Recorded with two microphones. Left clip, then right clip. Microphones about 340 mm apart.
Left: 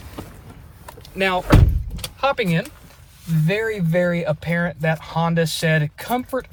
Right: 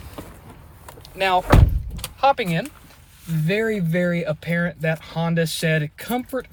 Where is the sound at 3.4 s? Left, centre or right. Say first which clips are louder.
Even; centre.